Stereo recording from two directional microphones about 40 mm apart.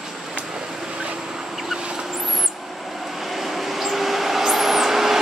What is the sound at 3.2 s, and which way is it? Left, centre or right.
Vehicle, centre.